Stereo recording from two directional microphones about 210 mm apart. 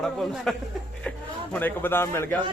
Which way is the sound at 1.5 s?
10° left (ahead or behind).